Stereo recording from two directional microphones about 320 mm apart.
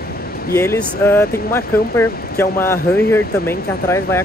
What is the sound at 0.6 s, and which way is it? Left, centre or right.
Speech, centre.